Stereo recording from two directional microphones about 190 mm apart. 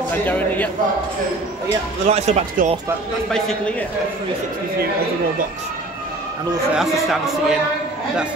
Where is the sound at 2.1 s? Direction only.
35° right (ahead or behind).